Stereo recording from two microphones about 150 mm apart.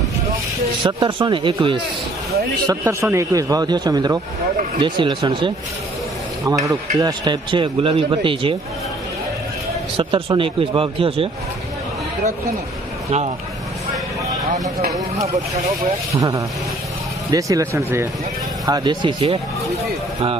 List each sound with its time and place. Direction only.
0.8 s a man's voice: 30° right (ahead or behind)
2.6 s a man's voice: 20° right (ahead or behind)
6.6 s a man's voice: 20° right (ahead or behind)
9.9 s a man's voice: 35° right (ahead or behind)
16.2 s a man's voice: 20° right (ahead or behind)